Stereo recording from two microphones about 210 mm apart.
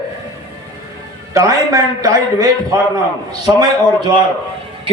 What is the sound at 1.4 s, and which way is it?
A man's voice, 15° right (ahead or behind).